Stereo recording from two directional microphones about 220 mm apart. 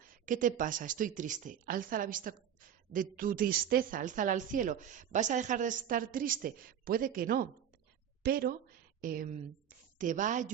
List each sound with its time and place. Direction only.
0.3 s a woman's voice: 35° right (ahead or behind)